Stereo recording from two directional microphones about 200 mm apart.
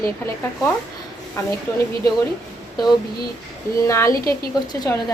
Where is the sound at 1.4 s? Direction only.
15° left (ahead or behind).